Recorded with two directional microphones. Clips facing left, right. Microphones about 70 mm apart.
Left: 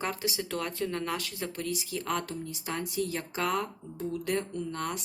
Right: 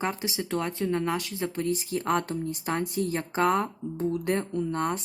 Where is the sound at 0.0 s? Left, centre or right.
Right.